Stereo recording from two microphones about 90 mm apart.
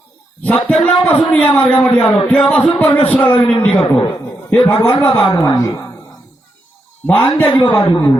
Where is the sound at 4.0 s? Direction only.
65° left (ahead or behind).